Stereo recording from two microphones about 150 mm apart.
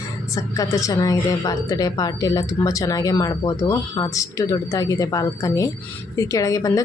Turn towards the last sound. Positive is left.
turn(degrees=20)  # may be behind; listen again after turning